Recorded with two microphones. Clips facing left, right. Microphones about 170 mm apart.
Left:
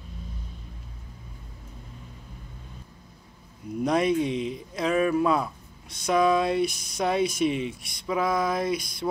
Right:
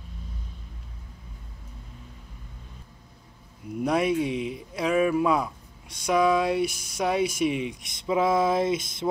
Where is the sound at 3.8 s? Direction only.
10° right (ahead or behind).